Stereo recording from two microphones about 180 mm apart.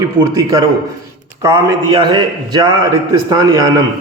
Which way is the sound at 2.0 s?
25° right (ahead or behind).